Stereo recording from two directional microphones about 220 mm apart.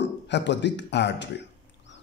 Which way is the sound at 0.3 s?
55° left (ahead or behind).